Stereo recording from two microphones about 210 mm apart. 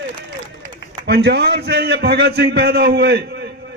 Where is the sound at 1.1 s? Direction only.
50° right (ahead or behind).